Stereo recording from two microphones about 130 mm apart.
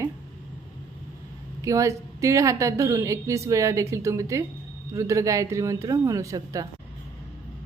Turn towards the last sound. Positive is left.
turn(degrees=-25)  # may be behind; listen again after turning